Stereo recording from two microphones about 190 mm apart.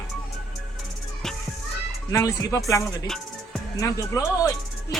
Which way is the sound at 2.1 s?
15° left (ahead or behind).